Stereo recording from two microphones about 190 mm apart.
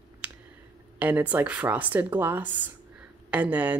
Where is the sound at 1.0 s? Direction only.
10° right (ahead or behind).